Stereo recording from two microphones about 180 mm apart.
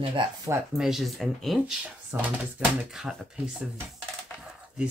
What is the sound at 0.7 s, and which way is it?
Speech, centre (ahead or behind).